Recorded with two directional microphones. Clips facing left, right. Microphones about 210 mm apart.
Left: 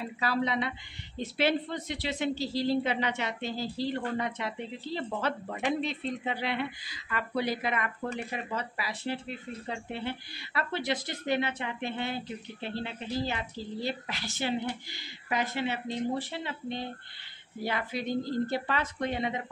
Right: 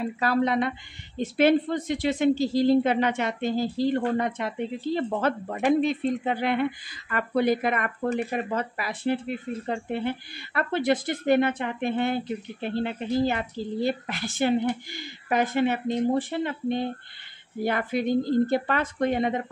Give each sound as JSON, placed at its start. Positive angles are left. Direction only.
{"t": 0.2, "sound": "speech", "side_deg": -50}